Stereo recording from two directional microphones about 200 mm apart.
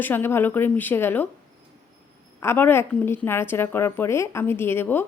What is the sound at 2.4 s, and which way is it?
A woman's voice, 10° left (ahead or behind).